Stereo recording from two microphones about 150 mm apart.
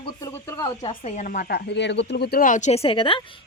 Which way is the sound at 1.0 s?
55° left (ahead or behind).